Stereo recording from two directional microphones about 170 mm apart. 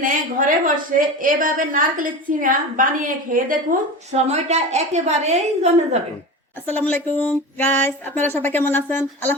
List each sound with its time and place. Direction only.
0.0 s a woman's voice: 55° right (ahead or behind)
6.7 s speech: 10° left (ahead or behind)